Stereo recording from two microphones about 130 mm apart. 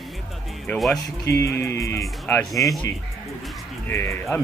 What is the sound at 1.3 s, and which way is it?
Speech, 20° left (ahead or behind).